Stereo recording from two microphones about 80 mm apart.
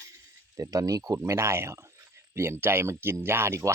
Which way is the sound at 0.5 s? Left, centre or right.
Right.